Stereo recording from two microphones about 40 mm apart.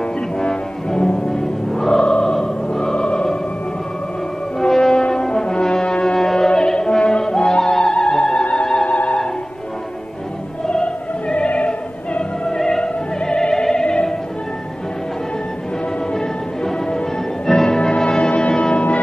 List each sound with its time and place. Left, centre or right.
0.0 s music: centre
1.9 s music: left
4.6 s music: centre
5.0 s brass instrument: centre
6.1 s opera: centre
8.8 s music: left
10.7 s opera: left
12.4 s opera: centre
16.1 s music: centre